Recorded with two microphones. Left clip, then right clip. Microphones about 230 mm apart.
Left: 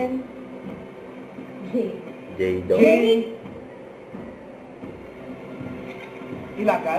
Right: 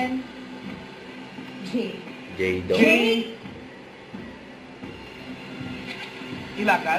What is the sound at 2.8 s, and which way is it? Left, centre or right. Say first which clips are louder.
Speech: left 2 dB; right.